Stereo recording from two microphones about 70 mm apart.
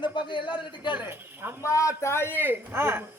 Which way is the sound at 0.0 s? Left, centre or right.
Left.